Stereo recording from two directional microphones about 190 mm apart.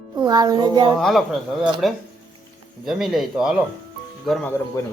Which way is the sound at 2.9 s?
Centre (ahead or behind).